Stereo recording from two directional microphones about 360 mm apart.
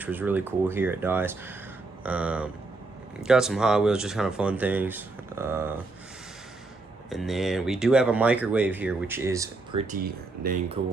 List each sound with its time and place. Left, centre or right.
0.0 s speech: centre
7.1 s speech: centre
10.4 s speech: right